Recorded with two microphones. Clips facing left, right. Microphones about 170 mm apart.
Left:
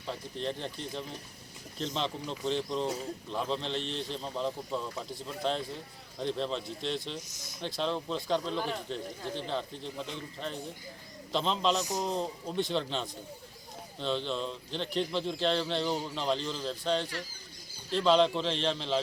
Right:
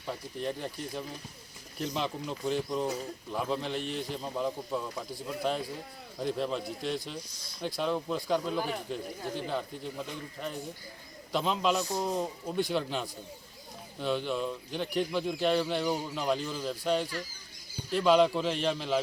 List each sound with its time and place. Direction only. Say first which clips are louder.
0.1 s speech: right 1 dB; 10° right (ahead or behind)
11.8 s a man's voice: right 1 dB; 15° left (ahead or behind)
12.0 s speech: right 1 dB; 5° right (ahead or behind)